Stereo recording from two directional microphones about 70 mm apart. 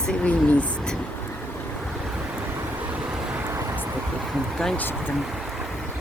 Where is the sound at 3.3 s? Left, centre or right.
Right.